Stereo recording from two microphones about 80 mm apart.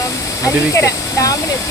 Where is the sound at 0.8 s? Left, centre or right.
Left.